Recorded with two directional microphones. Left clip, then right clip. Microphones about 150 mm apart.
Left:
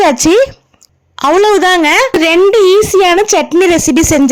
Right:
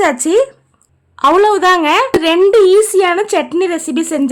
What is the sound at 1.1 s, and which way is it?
Speech, 35° left (ahead or behind).